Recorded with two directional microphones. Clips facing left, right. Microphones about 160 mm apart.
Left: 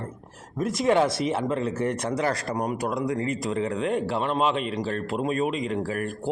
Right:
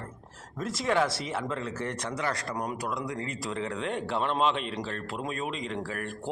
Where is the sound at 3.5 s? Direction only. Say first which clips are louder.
Left 4 dB; 40° left (ahead or behind).